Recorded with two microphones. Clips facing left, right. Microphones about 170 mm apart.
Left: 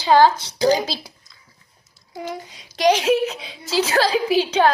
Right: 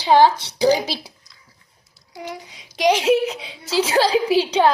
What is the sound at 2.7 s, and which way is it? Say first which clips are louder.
A woman's voice: even; 20° right (ahead or behind).